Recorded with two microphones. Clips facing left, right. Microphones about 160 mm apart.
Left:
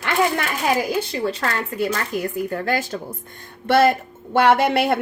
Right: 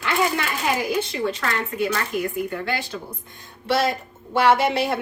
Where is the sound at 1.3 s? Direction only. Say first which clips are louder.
Left 1 dB; 35° left (ahead or behind).